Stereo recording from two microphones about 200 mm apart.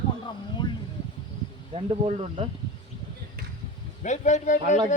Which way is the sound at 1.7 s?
30° right (ahead or behind).